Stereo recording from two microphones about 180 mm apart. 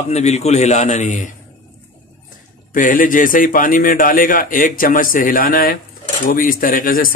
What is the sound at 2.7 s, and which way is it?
A man's voice, 50° left (ahead or behind).